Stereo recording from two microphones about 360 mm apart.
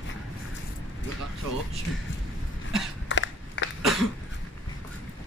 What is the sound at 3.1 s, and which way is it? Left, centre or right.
Crushing, left.